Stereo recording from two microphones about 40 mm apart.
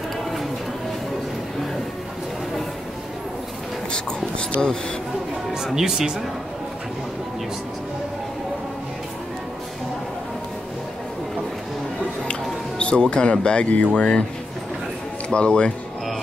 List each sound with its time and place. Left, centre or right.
5.8 s speech: centre
12.3 s music: left
13.7 s speech: left
15.2 s speech: left